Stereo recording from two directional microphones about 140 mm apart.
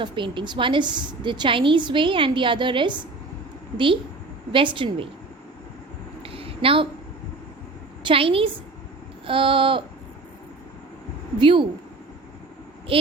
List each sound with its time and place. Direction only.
0.0 s a woman's voice: 35° right (ahead or behind)
4.5 s a woman's voice: 35° right (ahead or behind)
6.2 s a sound: 40° right (ahead or behind)
8.0 s a woman's voice: 40° right (ahead or behind)
11.3 s a woman's voice: 40° right (ahead or behind)
12.9 s a woman's voice: 40° right (ahead or behind)